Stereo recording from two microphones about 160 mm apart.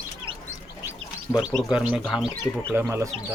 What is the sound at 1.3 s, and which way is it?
Speech, 5° right (ahead or behind).